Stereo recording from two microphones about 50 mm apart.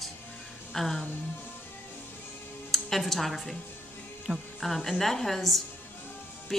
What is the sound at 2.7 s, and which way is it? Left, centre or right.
Speech, centre.